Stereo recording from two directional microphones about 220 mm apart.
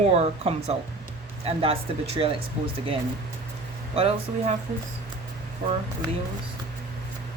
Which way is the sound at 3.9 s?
25° right (ahead or behind).